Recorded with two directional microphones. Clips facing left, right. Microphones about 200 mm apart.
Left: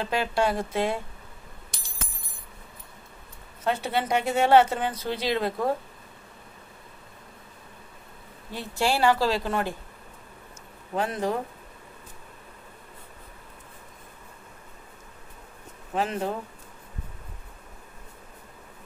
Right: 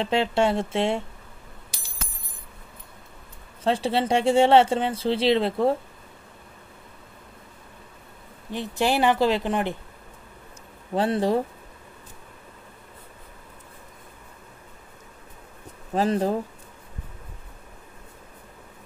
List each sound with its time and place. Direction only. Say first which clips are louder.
0.0 s speech: right 3 dB; 25° right (ahead or behind)
3.6 s speech: right 4 dB; 30° right (ahead or behind)
8.5 s speech: right 3 dB; 20° right (ahead or behind)
11.0 s speech: right 5 dB; 30° right (ahead or behind)
15.9 s speech: right 5 dB; 35° right (ahead or behind)